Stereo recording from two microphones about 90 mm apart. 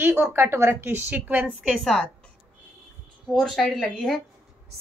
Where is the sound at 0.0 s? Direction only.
20° right (ahead or behind).